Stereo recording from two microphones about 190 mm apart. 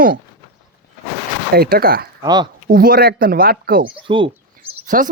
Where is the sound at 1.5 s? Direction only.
55° right (ahead or behind).